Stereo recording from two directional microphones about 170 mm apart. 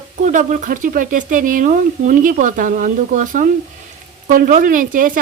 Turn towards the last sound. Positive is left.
turn(degrees=-55)  # may be behind; listen again after turning